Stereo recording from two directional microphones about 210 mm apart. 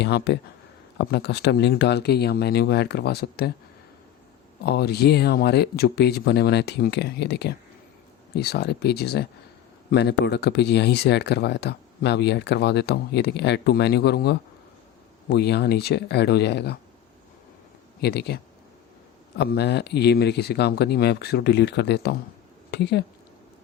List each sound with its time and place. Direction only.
0.0 s speech: 55° left (ahead or behind)
4.6 s speech: 50° left (ahead or behind)
18.0 s speech: 50° left (ahead or behind)
19.4 s speech: 50° left (ahead or behind)